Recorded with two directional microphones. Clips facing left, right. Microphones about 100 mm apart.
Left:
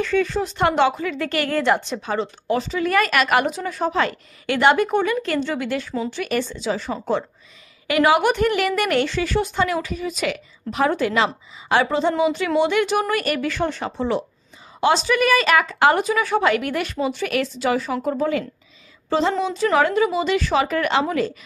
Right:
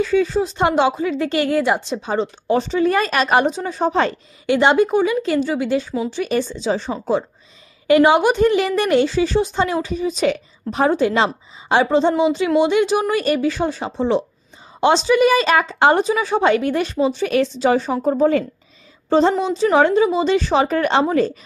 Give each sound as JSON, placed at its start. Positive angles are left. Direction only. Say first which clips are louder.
{"t": 0.0, "sound": "speech", "louder": "right 4 dB", "side_deg": -15}
{"t": 1.9, "sound": "a woman's voice", "louder": "right 3 dB", "side_deg": -25}